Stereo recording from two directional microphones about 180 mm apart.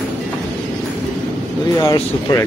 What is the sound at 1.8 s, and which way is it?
Speech, 20° left (ahead or behind).